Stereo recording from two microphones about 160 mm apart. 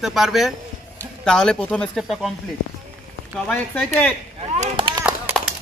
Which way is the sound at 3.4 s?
10° left (ahead or behind).